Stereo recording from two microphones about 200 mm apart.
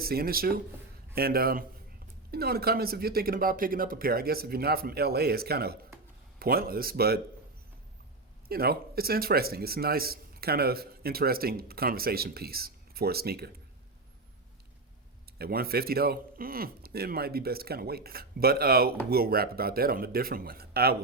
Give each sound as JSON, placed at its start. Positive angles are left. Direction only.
{"t": 0.0, "sound": "a man's voice", "side_deg": -50}
{"t": 8.4, "sound": "a man's voice", "side_deg": -50}
{"t": 15.4, "sound": "a man's voice", "side_deg": -50}